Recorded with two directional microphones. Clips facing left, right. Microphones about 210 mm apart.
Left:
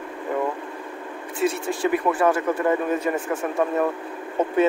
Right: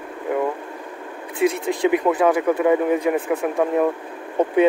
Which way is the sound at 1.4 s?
15° right (ahead or behind).